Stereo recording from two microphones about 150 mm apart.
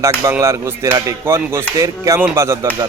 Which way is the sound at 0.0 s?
20° right (ahead or behind).